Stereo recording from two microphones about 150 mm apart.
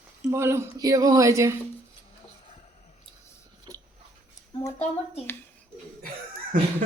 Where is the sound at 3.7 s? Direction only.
30° right (ahead or behind).